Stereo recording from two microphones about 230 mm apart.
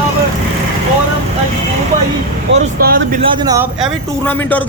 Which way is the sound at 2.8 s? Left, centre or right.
Right.